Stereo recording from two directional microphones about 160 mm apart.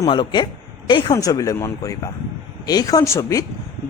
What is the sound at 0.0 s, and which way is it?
Speech, 30° left (ahead or behind).